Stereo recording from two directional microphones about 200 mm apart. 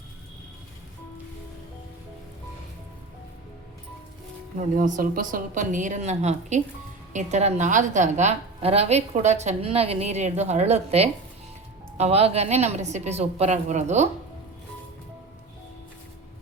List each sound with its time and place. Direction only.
4.5 s a woman's voice: 40° right (ahead or behind)